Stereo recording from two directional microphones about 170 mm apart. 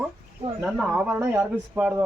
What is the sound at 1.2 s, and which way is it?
Speech, 15° right (ahead or behind).